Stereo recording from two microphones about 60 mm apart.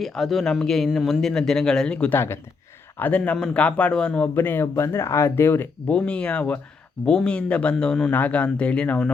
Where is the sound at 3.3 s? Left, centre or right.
Centre.